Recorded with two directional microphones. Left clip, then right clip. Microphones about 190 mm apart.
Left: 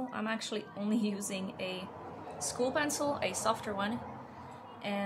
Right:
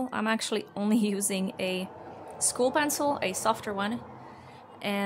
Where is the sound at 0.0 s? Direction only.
50° right (ahead or behind).